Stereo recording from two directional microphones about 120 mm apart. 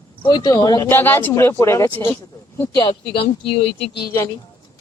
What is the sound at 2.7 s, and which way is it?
Speech, 45° left (ahead or behind).